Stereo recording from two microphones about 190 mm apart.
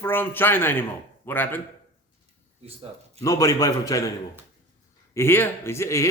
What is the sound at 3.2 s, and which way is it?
Speech, 15° left (ahead or behind).